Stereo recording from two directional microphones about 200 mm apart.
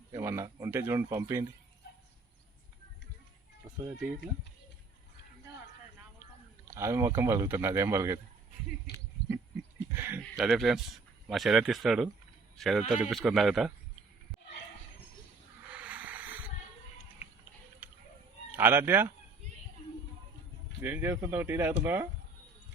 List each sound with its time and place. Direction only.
0.1 s speech: 15° right (ahead or behind)
3.6 s a sound: 20° right (ahead or behind)
6.7 s speech: 15° right (ahead or behind)
9.9 s speech: 10° right (ahead or behind)
10.2 s a man's voice: centre (ahead or behind)
15.7 s a sound: 5° right (ahead or behind)
18.5 s speech: 10° right (ahead or behind)
20.8 s speech: 10° right (ahead or behind)